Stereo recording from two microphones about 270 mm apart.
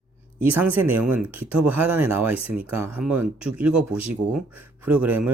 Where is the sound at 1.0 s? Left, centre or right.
Right.